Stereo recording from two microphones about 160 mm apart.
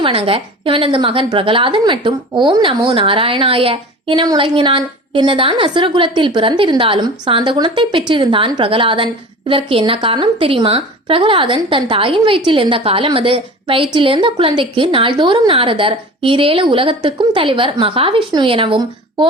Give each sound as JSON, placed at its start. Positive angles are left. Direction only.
{"t": 0.0, "sound": "a woman's voice", "side_deg": -35}